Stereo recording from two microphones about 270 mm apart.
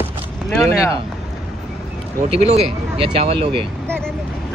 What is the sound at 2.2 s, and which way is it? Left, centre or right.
Speech, right.